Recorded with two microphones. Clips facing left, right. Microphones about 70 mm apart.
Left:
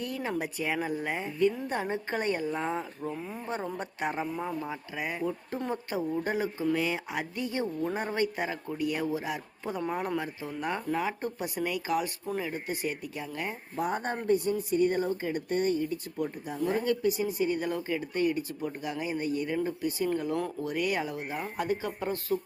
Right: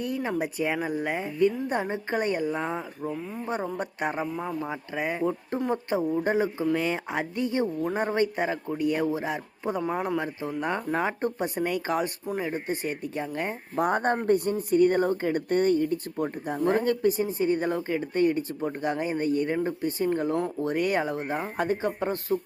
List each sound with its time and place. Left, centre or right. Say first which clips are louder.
0.3 s a man's voice: right 2 dB; centre
3.2 s speech: right 3 dB; centre
3.4 s a man's voice: right 5 dB; centre
4.2 s speech: right 2 dB; centre
4.6 s a man's voice: right 5 dB; right
9.9 s speech: right 3 dB; centre
10.6 s a man's voice: right 3 dB; right
11.0 s speech: right 5 dB; right
13.7 s speech: right 7 dB; right